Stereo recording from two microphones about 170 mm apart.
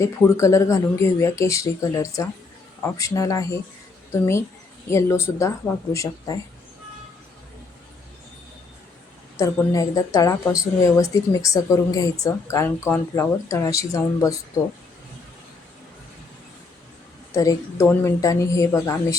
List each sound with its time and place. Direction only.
0.0 s a woman's voice: 15° left (ahead or behind)
9.4 s a woman's voice: 20° left (ahead or behind)
17.3 s speech: 20° left (ahead or behind)